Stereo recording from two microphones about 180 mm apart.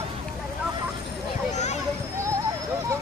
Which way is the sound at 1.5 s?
40° left (ahead or behind).